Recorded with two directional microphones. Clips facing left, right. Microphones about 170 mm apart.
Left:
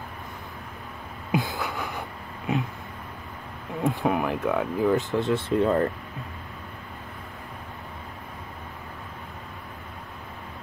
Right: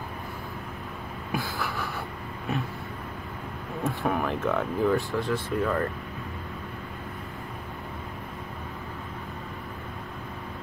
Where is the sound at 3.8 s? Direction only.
15° left (ahead or behind).